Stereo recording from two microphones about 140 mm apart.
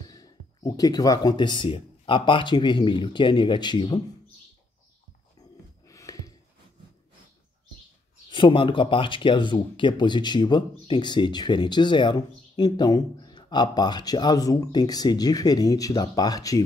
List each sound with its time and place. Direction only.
0.0 s speech: 30° left (ahead or behind)
5.9 s a sound: 25° left (ahead or behind)
8.3 s speech: 35° left (ahead or behind)